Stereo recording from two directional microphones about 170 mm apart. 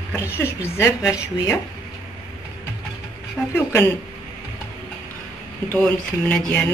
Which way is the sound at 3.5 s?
10° left (ahead or behind).